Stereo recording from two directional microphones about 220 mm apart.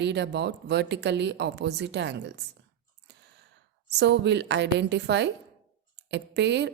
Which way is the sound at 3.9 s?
50° right (ahead or behind).